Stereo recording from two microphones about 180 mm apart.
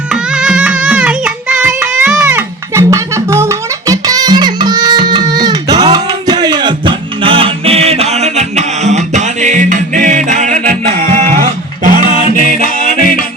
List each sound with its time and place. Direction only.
0.1 s music: 5° right (ahead or behind); by 13.1 s 40° right (ahead or behind)